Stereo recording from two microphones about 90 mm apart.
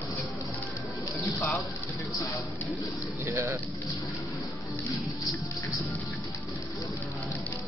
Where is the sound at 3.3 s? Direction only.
25° right (ahead or behind).